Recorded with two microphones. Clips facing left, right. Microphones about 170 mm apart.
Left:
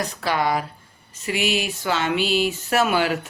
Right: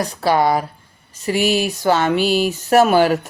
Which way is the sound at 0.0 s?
35° right (ahead or behind).